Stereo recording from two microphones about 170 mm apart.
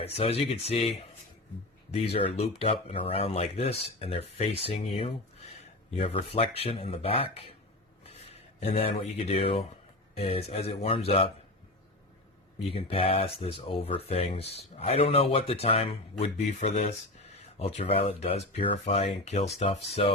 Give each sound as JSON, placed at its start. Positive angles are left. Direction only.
{"t": 0.0, "sound": "speech", "side_deg": 35}
{"t": 8.3, "sound": "speech", "side_deg": 40}
{"t": 12.6, "sound": "speech", "side_deg": 35}